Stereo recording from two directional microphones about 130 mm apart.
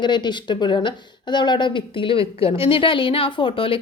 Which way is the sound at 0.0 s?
35° left (ahead or behind).